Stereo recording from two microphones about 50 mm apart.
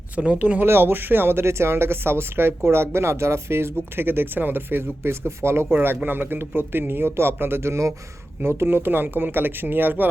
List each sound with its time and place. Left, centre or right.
0.2 s speech: right
0.6 s speech: right
6.1 s speech: right
8.4 s speech: right